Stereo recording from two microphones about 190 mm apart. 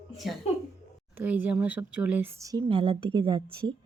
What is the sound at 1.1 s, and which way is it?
Speech, 5° right (ahead or behind).